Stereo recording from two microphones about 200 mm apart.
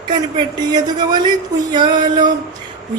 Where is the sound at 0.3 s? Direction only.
20° right (ahead or behind).